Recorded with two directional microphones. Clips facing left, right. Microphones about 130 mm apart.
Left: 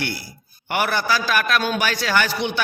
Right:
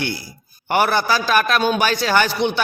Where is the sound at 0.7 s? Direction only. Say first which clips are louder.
Right 4 dB; 30° right (ahead or behind).